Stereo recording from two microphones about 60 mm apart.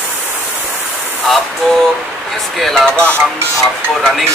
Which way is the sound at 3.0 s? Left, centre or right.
Right.